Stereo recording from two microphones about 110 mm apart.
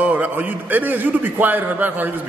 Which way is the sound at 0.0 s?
15° right (ahead or behind).